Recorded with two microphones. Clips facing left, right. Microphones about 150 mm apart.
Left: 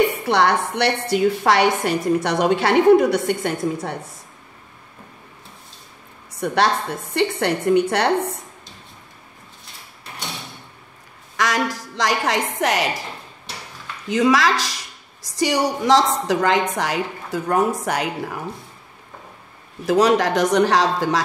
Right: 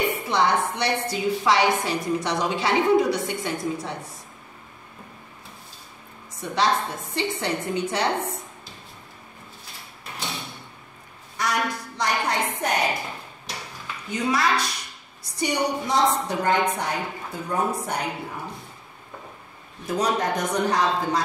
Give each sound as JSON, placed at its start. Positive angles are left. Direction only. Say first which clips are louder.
{"t": 0.2, "sound": "a woman's voice", "louder": "left 4 dB", "side_deg": 70}
{"t": 6.4, "sound": "a woman's voice", "louder": "left 4 dB", "side_deg": 65}
{"t": 11.3, "sound": "a woman's voice", "louder": "left 4 dB", "side_deg": 90}
{"t": 14.0, "sound": "a woman's voice", "louder": "left 7 dB", "side_deg": 90}
{"t": 19.9, "sound": "a woman's voice", "louder": "left 8 dB", "side_deg": 90}